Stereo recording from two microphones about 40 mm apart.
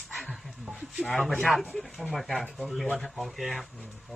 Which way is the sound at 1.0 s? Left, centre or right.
Centre.